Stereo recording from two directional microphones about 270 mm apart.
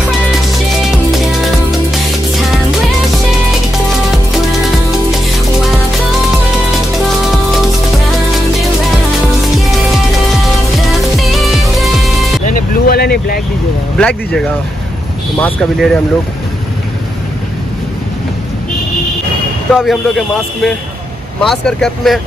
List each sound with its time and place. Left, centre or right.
11.0 s music: centre
12.4 s vehicle: left
13.9 s a man's voice: centre
15.4 s a man's voice: centre
19.7 s a man's voice: centre